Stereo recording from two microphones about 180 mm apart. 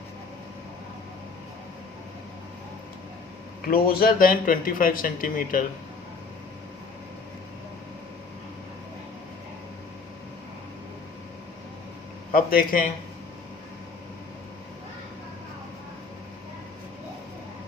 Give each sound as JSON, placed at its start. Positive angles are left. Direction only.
{"t": 3.8, "sound": "speech", "side_deg": 55}
{"t": 12.3, "sound": "speech", "side_deg": 50}